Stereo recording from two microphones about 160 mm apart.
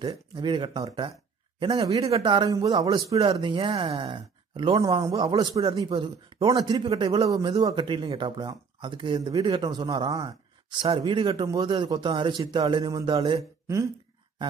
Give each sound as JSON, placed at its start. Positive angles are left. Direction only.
{"t": 0.0, "sound": "speech", "side_deg": -30}